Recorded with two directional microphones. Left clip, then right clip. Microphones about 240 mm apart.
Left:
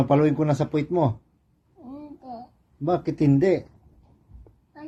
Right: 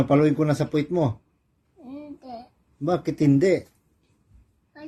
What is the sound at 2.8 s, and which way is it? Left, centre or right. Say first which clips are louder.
Speech: even; right.